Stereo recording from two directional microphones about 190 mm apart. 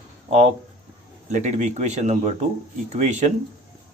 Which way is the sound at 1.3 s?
40° right (ahead or behind).